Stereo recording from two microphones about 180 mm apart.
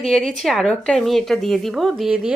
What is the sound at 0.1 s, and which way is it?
Speech, 5° left (ahead or behind).